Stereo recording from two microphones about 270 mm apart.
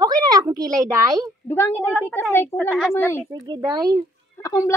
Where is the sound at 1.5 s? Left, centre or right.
Centre.